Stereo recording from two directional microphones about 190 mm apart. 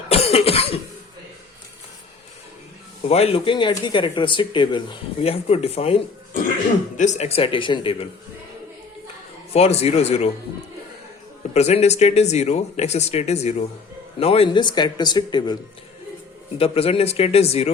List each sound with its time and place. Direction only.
0.1 s cough: 30° left (ahead or behind)
3.1 s speech: 30° left (ahead or behind)
9.5 s speech: 35° left (ahead or behind)
11.5 s speech: 35° left (ahead or behind)
16.6 s speech: 30° left (ahead or behind)